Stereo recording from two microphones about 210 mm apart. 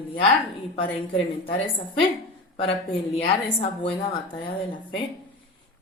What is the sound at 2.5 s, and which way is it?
A woman's voice, 25° left (ahead or behind).